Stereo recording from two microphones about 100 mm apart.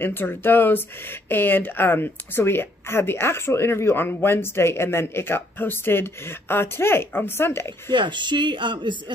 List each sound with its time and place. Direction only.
0.0 s speech: 20° left (ahead or behind)
7.9 s speech: 50° right (ahead or behind)